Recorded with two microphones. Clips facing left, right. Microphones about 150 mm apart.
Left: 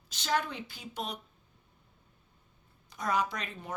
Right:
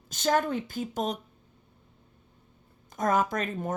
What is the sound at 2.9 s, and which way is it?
Speech, 45° right (ahead or behind).